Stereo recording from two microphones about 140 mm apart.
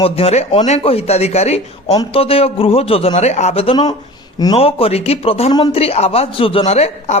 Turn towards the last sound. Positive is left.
turn(degrees=50)  # may be behind; listen again after turning